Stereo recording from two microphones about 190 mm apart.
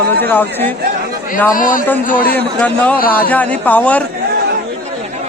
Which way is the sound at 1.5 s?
45° left (ahead or behind).